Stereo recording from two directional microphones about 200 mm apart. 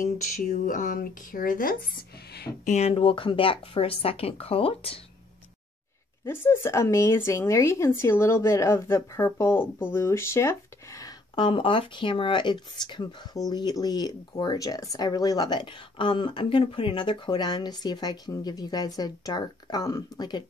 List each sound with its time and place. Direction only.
0.0 s speech: 40° left (ahead or behind)
2.7 s speech: 30° left (ahead or behind)
6.2 s speech: 10° left (ahead or behind)